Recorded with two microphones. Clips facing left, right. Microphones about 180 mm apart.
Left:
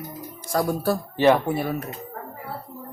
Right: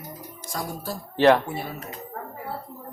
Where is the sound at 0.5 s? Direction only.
65° left (ahead or behind).